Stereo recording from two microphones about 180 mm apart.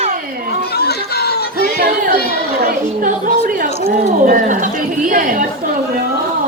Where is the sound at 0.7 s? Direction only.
60° left (ahead or behind).